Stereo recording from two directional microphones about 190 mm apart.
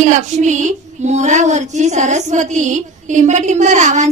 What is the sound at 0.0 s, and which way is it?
Child singing, 40° right (ahead or behind).